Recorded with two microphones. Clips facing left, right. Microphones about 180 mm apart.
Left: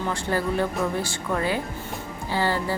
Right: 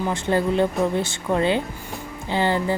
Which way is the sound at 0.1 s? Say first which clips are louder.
Right 4 dB; 20° right (ahead or behind).